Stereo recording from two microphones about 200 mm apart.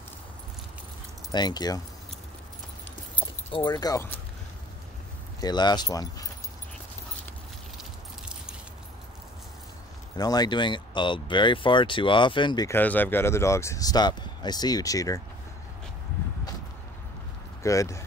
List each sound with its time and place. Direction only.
1.3 s speech: 20° left (ahead or behind)
3.5 s speech: 20° left (ahead or behind)
5.4 s speech: 20° left (ahead or behind)
10.1 s speech: 20° left (ahead or behind)
17.6 s speech: 15° left (ahead or behind)